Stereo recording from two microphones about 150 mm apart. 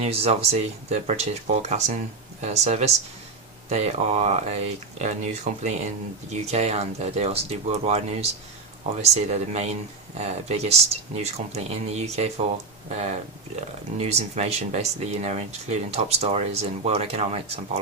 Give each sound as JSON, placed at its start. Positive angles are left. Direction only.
{"t": 0.0, "sound": "speech", "side_deg": -45}